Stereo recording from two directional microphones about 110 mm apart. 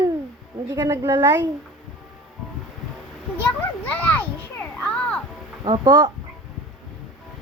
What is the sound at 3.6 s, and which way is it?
Children playing, 15° left (ahead or behind).